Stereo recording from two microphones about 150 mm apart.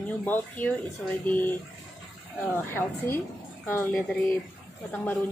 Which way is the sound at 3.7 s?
15° left (ahead or behind).